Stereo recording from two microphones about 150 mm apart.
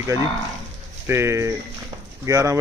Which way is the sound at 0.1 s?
20° right (ahead or behind).